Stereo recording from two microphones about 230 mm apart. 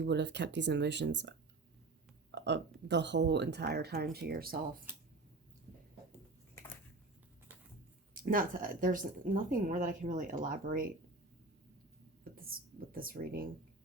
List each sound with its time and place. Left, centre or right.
0.0 s speech: right
2.3 s speech: right
8.1 s speech: right
12.2 s speech: right